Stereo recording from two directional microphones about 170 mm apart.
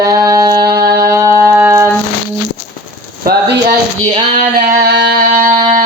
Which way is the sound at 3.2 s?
70° right (ahead or behind).